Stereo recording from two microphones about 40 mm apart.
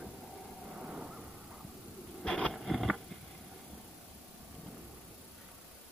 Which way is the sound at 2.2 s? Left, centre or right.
Centre.